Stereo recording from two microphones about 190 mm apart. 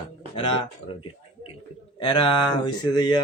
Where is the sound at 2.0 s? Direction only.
25° left (ahead or behind).